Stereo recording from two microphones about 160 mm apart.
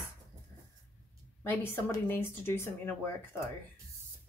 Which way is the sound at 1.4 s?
15° left (ahead or behind).